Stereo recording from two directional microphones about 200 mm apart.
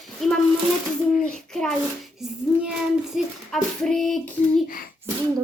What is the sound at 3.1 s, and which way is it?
Speech, centre (ahead or behind).